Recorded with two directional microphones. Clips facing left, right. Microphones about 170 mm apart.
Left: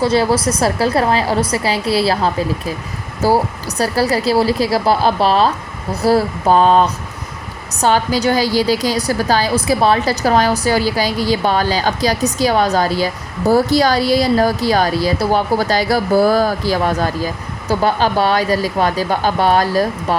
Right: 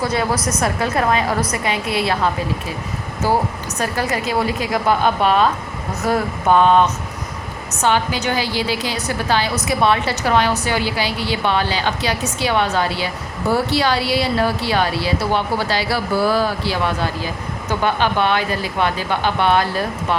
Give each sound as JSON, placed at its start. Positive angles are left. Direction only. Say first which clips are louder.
{"t": 0.0, "sound": "a woman's voice", "louder": "left 6 dB", "side_deg": 30}